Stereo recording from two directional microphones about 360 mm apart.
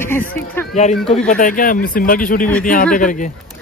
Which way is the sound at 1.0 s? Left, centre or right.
Centre.